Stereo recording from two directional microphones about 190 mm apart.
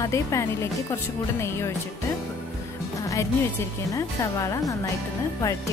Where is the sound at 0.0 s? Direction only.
15° left (ahead or behind).